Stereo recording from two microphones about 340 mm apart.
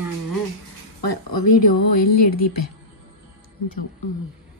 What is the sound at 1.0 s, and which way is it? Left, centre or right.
Speech, left.